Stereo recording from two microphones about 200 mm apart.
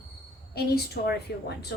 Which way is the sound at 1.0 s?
55° left (ahead or behind).